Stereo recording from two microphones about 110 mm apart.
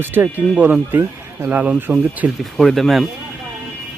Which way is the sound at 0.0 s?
15° right (ahead or behind).